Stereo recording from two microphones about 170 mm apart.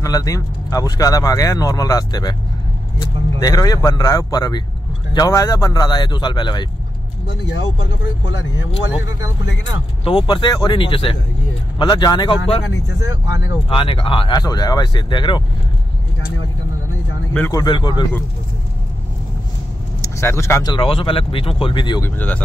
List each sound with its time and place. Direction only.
0.0 s speech: 20° left (ahead or behind)
3.3 s speech: 20° left (ahead or behind)
7.2 s speech: 90° left
10.0 s speech: 30° left (ahead or behind)
13.7 s speech: 30° left (ahead or behind)
17.5 s speech: 25° left (ahead or behind)
20.0 s speech: 15° left (ahead or behind)
20.7 s speech: 30° left (ahead or behind)
22.0 s speech: 10° left (ahead or behind)